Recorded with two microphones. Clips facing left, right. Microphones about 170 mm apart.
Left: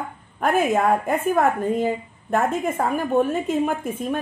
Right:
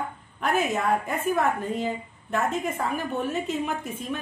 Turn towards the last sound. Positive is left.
turn(degrees=50)  # may be behind; listen again after turning